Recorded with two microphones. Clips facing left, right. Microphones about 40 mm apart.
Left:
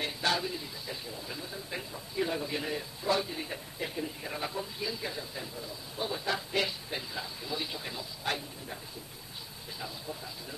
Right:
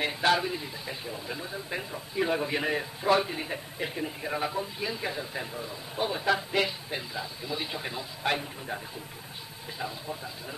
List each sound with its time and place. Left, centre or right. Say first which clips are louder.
0.0 s a man's voice: right 6 dB; right
6.2 s a man's voice: right 5 dB; centre
9.8 s a man's voice: right 5 dB; right